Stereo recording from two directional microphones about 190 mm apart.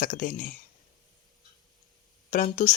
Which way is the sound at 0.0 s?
45° left (ahead or behind).